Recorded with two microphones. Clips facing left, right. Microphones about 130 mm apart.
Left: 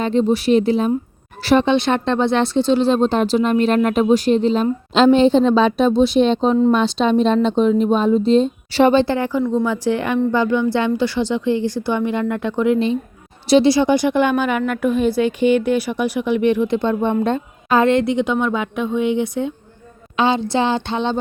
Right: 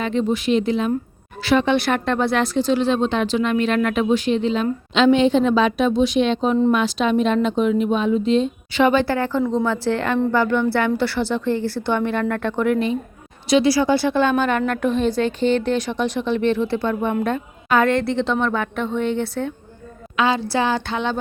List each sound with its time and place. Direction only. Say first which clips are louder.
0.0 s a woman's voice: left 4 dB; 35° left (ahead or behind)
1.7 s a woman's voice: left 2 dB; 20° left (ahead or behind)